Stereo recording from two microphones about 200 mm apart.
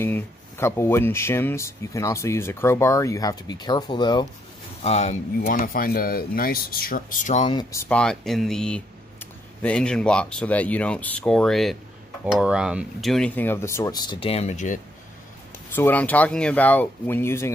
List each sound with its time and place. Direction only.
0.0 s speech: 10° left (ahead or behind)
4.8 s speech: 35° left (ahead or behind)
7.4 s speech: 15° left (ahead or behind); by 14.8 s 35° left (ahead or behind)
15.7 s speech: 10° left (ahead or behind)